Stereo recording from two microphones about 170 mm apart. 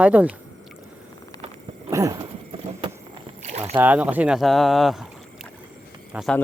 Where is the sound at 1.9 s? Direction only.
20° right (ahead or behind).